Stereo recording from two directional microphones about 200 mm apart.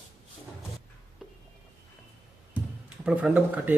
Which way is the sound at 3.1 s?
5° right (ahead or behind).